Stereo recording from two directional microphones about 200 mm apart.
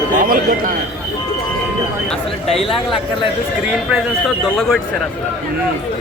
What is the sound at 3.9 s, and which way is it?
Speech, centre (ahead or behind).